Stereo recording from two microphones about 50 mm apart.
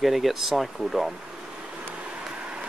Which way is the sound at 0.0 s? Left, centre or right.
Centre.